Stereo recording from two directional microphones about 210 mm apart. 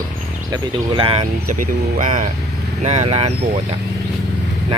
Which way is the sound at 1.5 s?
40° right (ahead or behind).